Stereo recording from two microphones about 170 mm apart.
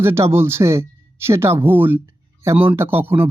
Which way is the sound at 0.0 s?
15° right (ahead or behind).